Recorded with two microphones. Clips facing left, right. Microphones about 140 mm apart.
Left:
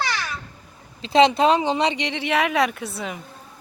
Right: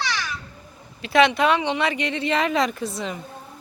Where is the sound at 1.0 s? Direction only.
25° left (ahead or behind).